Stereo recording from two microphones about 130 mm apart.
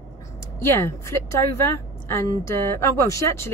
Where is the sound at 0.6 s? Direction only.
20° left (ahead or behind).